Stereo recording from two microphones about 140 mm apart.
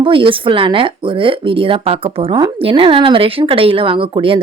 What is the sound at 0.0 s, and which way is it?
A woman's voice, 40° right (ahead or behind).